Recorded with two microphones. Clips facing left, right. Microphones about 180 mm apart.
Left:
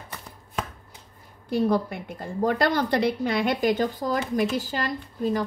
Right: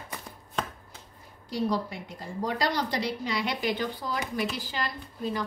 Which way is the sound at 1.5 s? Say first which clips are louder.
Left 6 dB; 55° left (ahead or behind).